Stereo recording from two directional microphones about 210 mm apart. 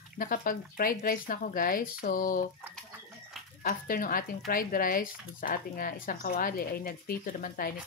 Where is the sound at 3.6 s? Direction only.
40° left (ahead or behind).